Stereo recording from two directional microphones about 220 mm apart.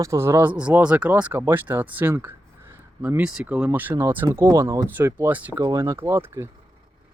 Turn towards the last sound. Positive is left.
turn(degrees=-10)  # may be behind; listen again after turning